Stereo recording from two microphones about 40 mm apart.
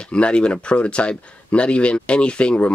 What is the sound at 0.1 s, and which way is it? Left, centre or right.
Speech, left.